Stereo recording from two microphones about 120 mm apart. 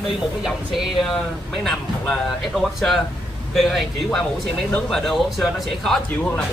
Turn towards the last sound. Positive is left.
turn(degrees=0)  # may be behind; listen again after turning